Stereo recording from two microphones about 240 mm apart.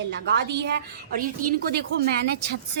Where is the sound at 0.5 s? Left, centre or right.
Right.